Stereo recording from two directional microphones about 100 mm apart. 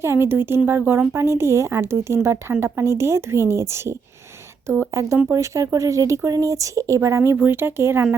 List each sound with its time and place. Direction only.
0.0 s a woman's voice: 25° right (ahead or behind)